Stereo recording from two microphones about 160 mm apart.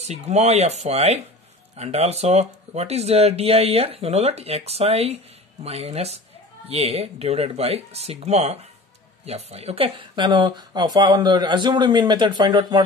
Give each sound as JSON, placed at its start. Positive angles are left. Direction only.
{"t": 0.0, "sound": "speech", "side_deg": -45}